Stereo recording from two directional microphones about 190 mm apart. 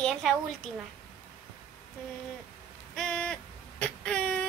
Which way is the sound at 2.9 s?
5° left (ahead or behind).